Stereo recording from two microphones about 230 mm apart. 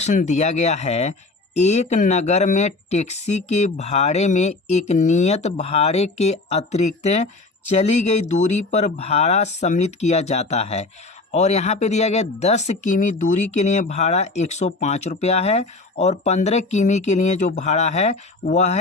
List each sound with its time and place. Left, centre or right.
0.0 s speech: left